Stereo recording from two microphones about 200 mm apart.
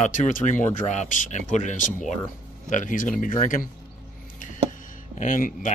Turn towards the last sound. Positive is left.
turn(degrees=40)  # may be behind; listen again after turning